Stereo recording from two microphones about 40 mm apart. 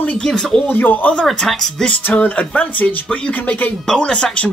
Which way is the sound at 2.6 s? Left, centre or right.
Left.